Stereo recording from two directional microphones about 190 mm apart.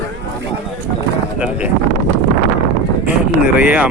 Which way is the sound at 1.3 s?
5° right (ahead or behind).